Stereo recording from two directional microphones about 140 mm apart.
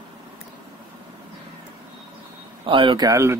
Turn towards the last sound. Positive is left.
turn(degrees=-25)  # may be behind; listen again after turning